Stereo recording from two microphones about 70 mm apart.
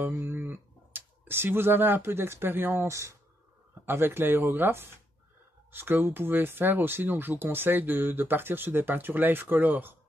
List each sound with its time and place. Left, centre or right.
0.0 s speech: right
3.8 s speech: right